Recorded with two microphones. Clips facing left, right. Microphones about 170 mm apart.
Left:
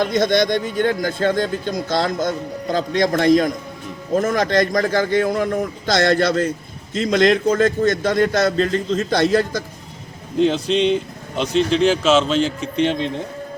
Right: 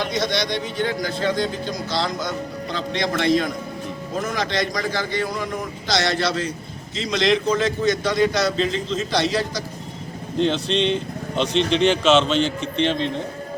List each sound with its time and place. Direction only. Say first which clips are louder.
0.0 s speech: left 7 dB; 50° left (ahead or behind)
10.3 s speech: left 4 dB; 5° left (ahead or behind)